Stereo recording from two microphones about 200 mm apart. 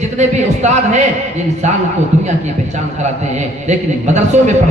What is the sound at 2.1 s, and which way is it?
Speech, 35° right (ahead or behind).